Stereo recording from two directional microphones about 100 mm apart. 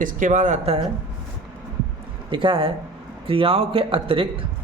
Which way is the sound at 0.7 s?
90° right.